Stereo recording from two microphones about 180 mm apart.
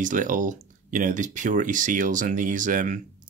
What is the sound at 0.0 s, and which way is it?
Speech, 45° right (ahead or behind).